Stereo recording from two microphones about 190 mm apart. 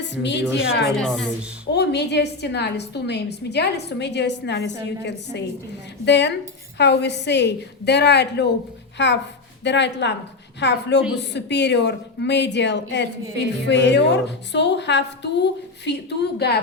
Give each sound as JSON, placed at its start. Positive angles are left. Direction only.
{"t": 0.0, "sound": "a woman's voice", "side_deg": 70}
{"t": 0.9, "sound": "a woman's voice", "side_deg": 0}
{"t": 1.7, "sound": "a woman's voice", "side_deg": 60}